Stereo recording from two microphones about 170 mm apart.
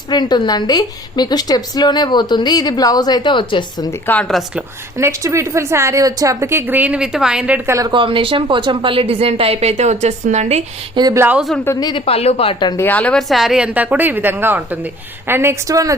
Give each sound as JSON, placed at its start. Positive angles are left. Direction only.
{"t": 0.1, "sound": "a woman's voice", "side_deg": 25}
{"t": 4.0, "sound": "a woman's voice", "side_deg": 10}
{"t": 4.9, "sound": "a woman's voice", "side_deg": -15}
{"t": 7.8, "sound": "speech", "side_deg": -25}
{"t": 10.9, "sound": "a woman's voice", "side_deg": -20}
{"t": 11.3, "sound": "a woman's voice", "side_deg": 0}
{"t": 11.6, "sound": "a woman's voice", "side_deg": 20}
{"t": 12.8, "sound": "a woman's voice", "side_deg": 10}